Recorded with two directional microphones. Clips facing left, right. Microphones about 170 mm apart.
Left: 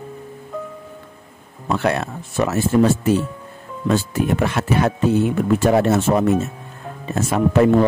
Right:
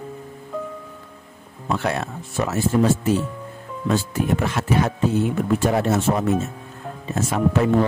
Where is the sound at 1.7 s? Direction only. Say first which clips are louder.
Left 4 dB; 70° left (ahead or behind).